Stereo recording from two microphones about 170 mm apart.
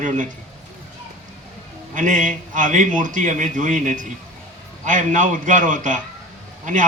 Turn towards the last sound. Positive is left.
turn(degrees=-45)  # may be behind; listen again after turning